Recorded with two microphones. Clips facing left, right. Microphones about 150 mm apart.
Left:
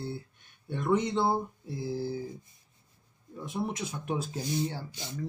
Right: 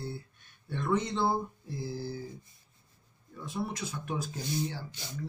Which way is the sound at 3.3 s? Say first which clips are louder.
Left 2 dB; 20° left (ahead or behind).